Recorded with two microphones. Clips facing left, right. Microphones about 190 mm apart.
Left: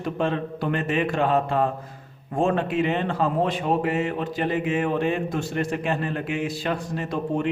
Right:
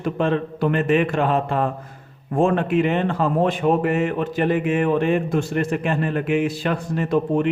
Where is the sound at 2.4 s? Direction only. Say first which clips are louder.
Right 4 dB; 55° right (ahead or behind).